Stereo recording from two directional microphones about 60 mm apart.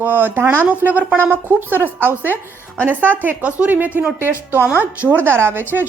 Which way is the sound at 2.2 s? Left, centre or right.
Left.